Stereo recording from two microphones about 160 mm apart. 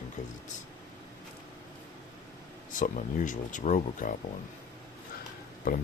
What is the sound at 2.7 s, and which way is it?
Speech, 55° left (ahead or behind).